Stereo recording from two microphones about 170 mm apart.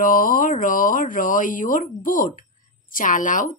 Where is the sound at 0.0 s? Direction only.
55° left (ahead or behind).